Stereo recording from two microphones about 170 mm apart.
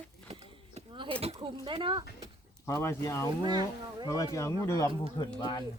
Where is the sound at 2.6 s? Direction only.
15° left (ahead or behind).